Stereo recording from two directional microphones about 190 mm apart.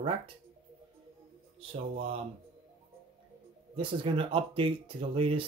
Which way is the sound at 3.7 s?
30° right (ahead or behind).